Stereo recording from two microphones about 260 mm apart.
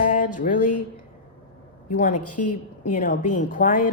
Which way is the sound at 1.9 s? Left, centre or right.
Left.